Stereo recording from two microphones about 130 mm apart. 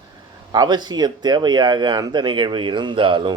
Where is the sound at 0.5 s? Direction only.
35° right (ahead or behind).